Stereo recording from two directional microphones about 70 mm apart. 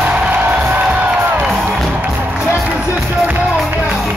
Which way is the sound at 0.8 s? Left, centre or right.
Right.